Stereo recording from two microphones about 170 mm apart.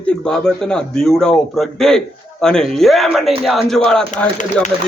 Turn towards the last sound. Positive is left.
turn(degrees=5)  # may be behind; listen again after turning